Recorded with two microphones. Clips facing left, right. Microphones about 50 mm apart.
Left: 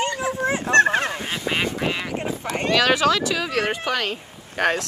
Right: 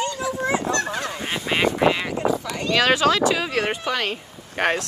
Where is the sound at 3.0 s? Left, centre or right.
Right.